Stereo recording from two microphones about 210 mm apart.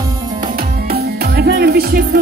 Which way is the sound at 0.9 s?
50° right (ahead or behind).